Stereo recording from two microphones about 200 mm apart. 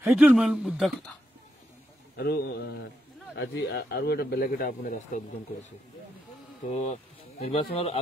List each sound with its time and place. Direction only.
0.0 s speech: 10° right (ahead or behind)
2.1 s speech: 50° left (ahead or behind)
6.7 s speech: 35° left (ahead or behind)